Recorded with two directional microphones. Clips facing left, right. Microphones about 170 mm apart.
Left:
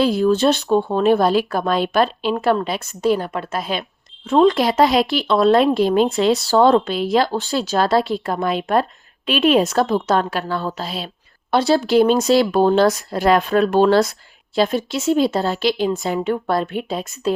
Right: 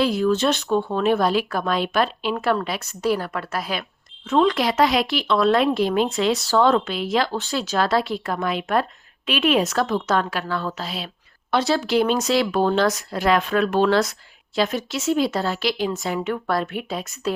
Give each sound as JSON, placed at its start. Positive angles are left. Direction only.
{"t": 0.0, "sound": "speech", "side_deg": 30}